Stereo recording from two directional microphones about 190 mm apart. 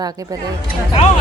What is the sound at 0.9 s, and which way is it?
Speech, 35° left (ahead or behind).